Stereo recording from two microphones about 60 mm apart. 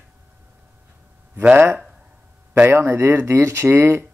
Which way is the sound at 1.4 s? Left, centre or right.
Right.